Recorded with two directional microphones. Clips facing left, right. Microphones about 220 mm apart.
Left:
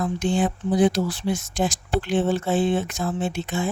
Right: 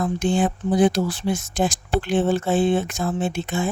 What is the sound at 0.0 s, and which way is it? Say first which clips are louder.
Speech: right 2 dB; 50° right (ahead or behind).